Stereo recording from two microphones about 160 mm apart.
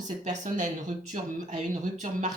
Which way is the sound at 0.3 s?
50° right (ahead or behind).